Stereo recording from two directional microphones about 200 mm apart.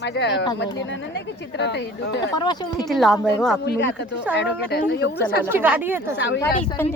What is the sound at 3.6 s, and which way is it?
Speech, 55° left (ahead or behind).